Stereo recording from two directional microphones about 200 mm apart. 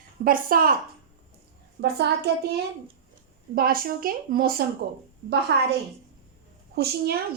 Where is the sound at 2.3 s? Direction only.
55° right (ahead or behind).